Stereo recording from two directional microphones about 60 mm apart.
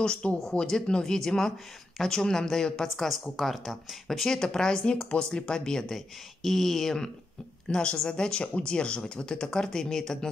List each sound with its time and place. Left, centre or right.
0.0 s a woman's voice: centre
7.6 s speech: centre